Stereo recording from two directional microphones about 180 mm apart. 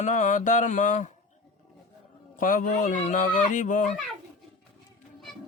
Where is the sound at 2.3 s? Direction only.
50° left (ahead or behind).